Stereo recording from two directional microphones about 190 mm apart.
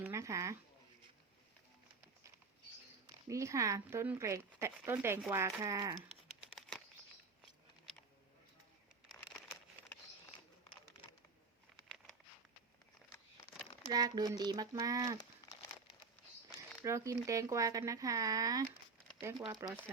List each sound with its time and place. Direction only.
0.0 s a sound: 15° right (ahead or behind)
3.2 s speech: 15° right (ahead or behind)
6.6 s bird flight: centre (ahead or behind)
13.9 s speech: 20° right (ahead or behind)
16.8 s speech: 15° right (ahead or behind)